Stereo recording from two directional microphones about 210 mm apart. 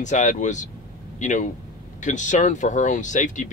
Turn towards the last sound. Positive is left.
turn(degrees=35)  # may be behind; listen again after turning